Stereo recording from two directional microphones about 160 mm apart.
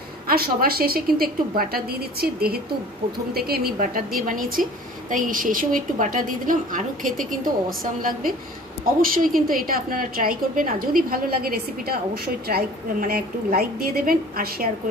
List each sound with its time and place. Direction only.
0.3 s a woman's voice: 70° right (ahead or behind)